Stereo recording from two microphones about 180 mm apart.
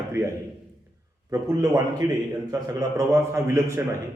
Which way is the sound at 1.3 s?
20° right (ahead or behind).